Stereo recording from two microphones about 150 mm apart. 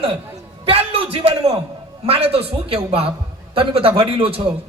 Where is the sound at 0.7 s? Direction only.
40° right (ahead or behind).